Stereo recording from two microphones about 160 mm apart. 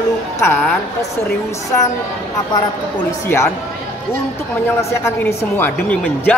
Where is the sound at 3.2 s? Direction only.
15° left (ahead or behind).